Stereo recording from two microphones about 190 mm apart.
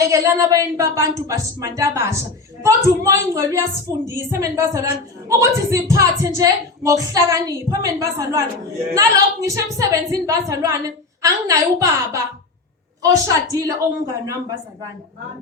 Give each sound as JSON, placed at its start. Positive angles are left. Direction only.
{"t": 0.0, "sound": "a woman's voice", "side_deg": -15}
{"t": 13.5, "sound": "a woman's voice", "side_deg": -15}